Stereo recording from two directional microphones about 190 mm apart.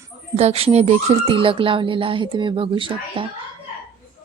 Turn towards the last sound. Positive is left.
turn(degrees=-25)  # may be behind; listen again after turning